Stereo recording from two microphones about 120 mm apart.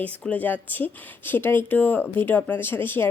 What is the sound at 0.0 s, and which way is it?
Speech, 15° left (ahead or behind).